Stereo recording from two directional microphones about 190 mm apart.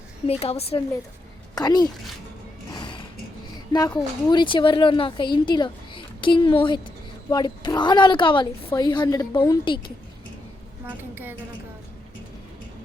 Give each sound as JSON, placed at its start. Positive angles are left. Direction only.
{"t": 0.3, "sound": "a woman's voice", "side_deg": 30}
{"t": 1.5, "sound": "speech", "side_deg": 20}
{"t": 2.6, "sound": "a sound", "side_deg": 20}
{"t": 3.7, "sound": "speech", "side_deg": 20}
{"t": 10.8, "sound": "a woman's voice", "side_deg": -10}